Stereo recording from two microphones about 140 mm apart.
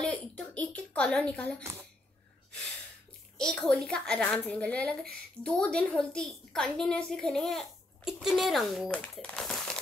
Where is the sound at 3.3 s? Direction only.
5° left (ahead or behind).